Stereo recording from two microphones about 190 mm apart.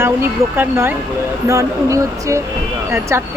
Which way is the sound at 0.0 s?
10° right (ahead or behind).